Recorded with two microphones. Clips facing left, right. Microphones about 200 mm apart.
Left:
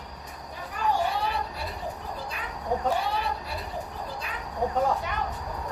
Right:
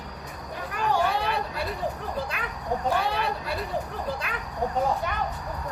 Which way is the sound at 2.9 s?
75° right (ahead or behind).